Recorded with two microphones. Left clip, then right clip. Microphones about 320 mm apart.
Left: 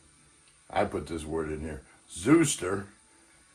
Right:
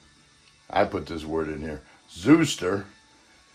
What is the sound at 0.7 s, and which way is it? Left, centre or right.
Speech, right.